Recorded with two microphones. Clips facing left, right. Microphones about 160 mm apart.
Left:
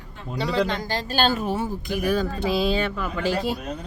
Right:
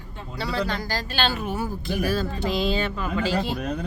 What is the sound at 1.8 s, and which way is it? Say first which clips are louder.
Speech: left 1 dB; 15° left (ahead or behind).